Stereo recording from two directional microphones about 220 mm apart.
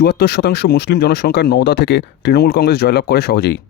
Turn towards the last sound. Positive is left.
turn(degrees=50)  # may be behind; listen again after turning